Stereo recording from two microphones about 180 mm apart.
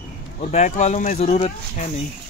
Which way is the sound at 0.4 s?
40° left (ahead or behind).